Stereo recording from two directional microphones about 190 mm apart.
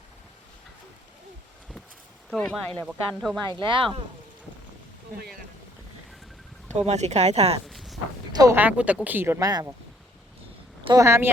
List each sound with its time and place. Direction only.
2.3 s speech: 5° left (ahead or behind)
3.5 s speech: 25° right (ahead or behind)
6.7 s speech: 35° right (ahead or behind)
7.7 s a sound: centre (ahead or behind)
8.4 s speech: 15° right (ahead or behind)
10.8 s speech: 15° right (ahead or behind)